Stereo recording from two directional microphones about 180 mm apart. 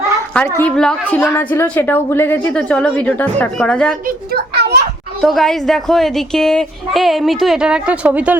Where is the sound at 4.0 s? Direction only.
55° right (ahead or behind).